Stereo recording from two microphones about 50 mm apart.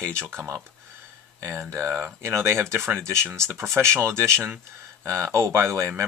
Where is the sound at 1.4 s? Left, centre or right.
Right.